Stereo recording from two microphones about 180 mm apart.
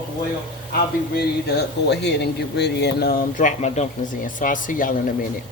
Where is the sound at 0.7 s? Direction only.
65° left (ahead or behind).